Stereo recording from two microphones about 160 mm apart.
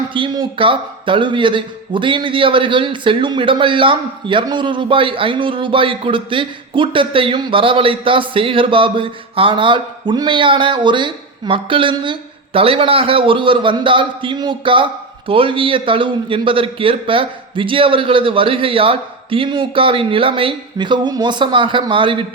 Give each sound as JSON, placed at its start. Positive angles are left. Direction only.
{"t": 0.1, "sound": "speech", "side_deg": -30}